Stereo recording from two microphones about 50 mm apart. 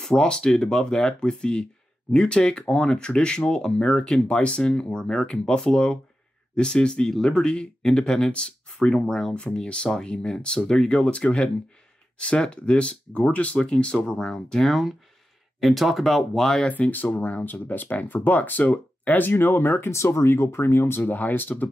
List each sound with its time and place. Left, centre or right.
0.0 s speech: centre
16.6 s speech: left
16.9 s speech: left
19.9 s speech: left